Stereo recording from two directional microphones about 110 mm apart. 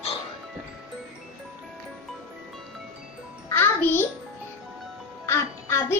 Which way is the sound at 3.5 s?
20° left (ahead or behind).